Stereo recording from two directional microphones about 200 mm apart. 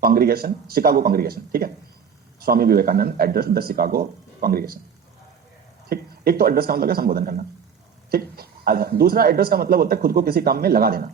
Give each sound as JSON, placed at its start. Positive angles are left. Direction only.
{"t": 0.0, "sound": "a man's voice", "side_deg": -50}
{"t": 5.9, "sound": "a man's voice", "side_deg": -50}